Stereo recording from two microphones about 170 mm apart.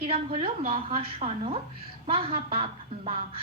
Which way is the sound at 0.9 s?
35° right (ahead or behind).